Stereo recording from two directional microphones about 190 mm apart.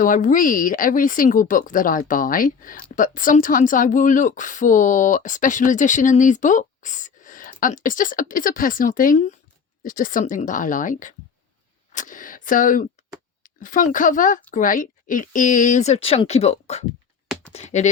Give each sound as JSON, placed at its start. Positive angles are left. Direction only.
{"t": 0.0, "sound": "speech", "side_deg": 45}
{"t": 11.9, "sound": "a sound", "side_deg": 45}
{"t": 13.4, "sound": "a woman's voice", "side_deg": 45}